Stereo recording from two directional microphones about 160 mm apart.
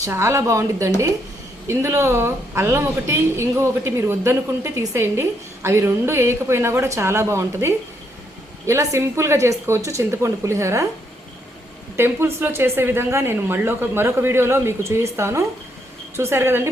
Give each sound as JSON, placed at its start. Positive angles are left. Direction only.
{"t": 0.0, "sound": "a woman's voice", "side_deg": -15}
{"t": 11.9, "sound": "a woman's voice", "side_deg": -15}